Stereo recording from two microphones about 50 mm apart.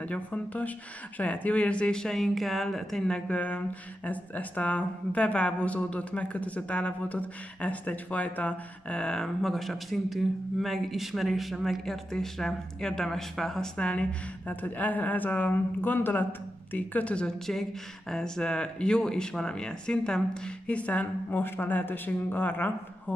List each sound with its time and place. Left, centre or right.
0.0 s speech: left; by 3.1 s centre
3.1 s speech: left
9.1 s speech: centre
13.7 s speech: left
14.5 s speech: left
18.1 s speech: centre; by 21.4 s left
21.4 s speech: left